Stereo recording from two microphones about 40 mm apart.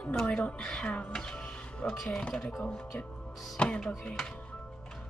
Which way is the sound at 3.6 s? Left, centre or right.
Left.